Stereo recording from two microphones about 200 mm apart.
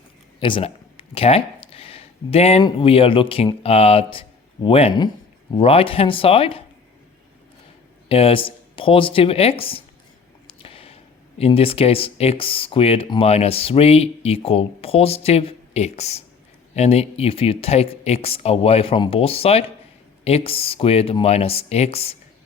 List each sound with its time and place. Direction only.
0.3 s speech: 25° left (ahead or behind)
8.1 s speech: 30° left (ahead or behind)
10.6 s a sound: 30° left (ahead or behind)
11.3 s speech: 30° left (ahead or behind)